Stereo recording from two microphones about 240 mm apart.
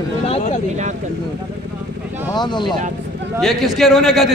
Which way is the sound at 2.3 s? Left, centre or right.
Centre.